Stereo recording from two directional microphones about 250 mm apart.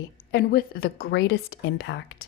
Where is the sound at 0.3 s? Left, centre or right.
Left.